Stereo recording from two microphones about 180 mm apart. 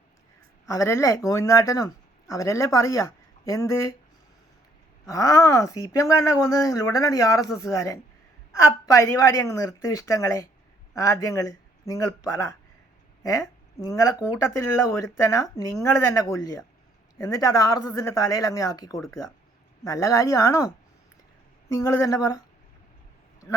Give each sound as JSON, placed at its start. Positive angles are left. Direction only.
{"t": 0.7, "sound": "speech", "side_deg": 15}
{"t": 5.0, "sound": "speech", "side_deg": 20}
{"t": 21.8, "sound": "speech", "side_deg": 15}